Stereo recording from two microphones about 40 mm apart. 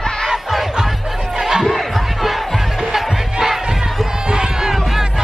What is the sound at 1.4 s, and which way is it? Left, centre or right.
Music, centre.